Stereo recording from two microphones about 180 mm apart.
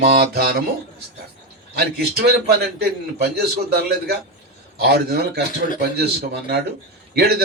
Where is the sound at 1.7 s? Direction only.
60° right (ahead or behind).